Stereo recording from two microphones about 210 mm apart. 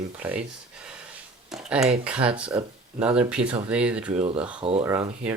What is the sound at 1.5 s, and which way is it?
Speech, 5° right (ahead or behind).